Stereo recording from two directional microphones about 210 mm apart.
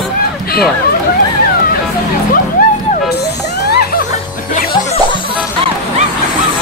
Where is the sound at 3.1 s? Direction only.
50° left (ahead or behind).